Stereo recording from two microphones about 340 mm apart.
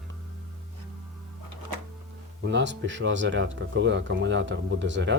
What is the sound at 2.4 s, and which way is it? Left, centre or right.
Speech, right.